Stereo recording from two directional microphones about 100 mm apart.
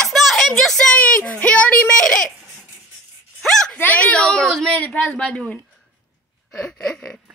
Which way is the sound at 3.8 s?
15° left (ahead or behind).